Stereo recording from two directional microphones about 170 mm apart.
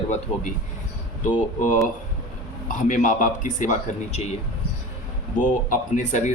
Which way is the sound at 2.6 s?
45° left (ahead or behind).